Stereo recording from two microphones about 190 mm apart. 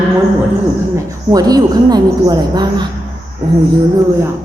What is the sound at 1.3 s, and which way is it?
Speech, 20° right (ahead or behind).